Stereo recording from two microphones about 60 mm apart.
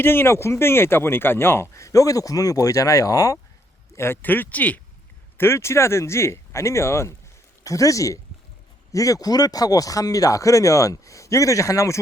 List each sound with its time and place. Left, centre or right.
0.0 s speech: left
1.7 s speech: left
3.9 s speech: left
4.2 s speech: left
5.4 s speech: left
7.6 s speech: left